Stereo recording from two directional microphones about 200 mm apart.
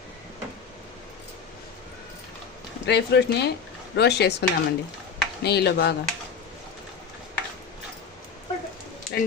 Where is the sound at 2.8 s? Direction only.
55° left (ahead or behind).